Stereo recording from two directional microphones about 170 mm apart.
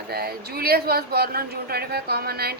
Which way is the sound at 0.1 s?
65° right (ahead or behind).